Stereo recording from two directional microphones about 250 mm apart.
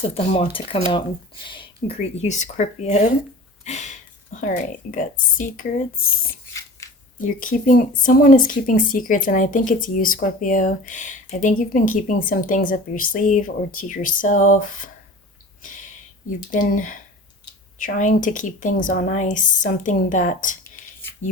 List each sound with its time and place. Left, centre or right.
0.0 s speech: left
3.6 s a sound: left
4.4 s speech: left
6.8 s a sound: centre
7.2 s speech: left
16.5 s speech: left